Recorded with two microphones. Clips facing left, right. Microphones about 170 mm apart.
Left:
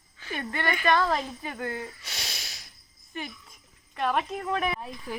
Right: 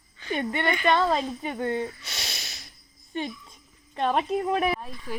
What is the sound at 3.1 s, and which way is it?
A child's voice, 30° right (ahead or behind).